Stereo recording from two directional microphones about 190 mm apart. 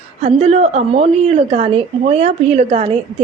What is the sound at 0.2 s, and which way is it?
A woman's voice, 35° right (ahead or behind).